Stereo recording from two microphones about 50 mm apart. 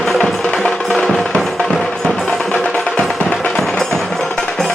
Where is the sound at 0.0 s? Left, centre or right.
Centre.